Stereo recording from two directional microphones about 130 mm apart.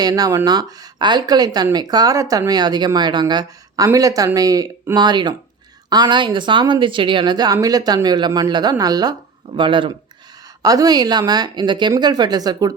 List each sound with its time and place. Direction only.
0.0 s speech: 30° right (ahead or behind)
10.6 s speech: 30° right (ahead or behind)